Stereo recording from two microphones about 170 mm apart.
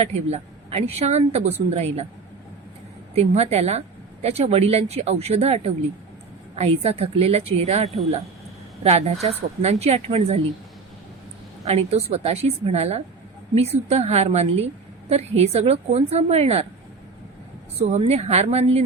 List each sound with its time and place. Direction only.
0.0 s a woman's voice: 40° right (ahead or behind)
3.2 s a woman's voice: 40° right (ahead or behind)
11.6 s a woman's voice: 40° right (ahead or behind)
17.7 s a woman's voice: 40° right (ahead or behind)